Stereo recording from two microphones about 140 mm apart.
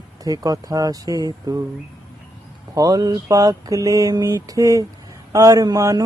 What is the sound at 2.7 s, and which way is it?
Speech, 25° right (ahead or behind).